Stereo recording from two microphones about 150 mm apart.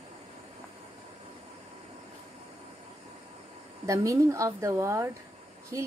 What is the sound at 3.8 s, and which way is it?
A woman's voice, 20° right (ahead or behind).